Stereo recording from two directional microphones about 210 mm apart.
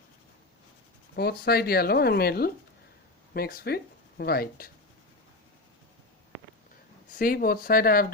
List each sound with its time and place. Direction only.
1.1 s speech: 50° left (ahead or behind)
7.2 s speech: 45° left (ahead or behind)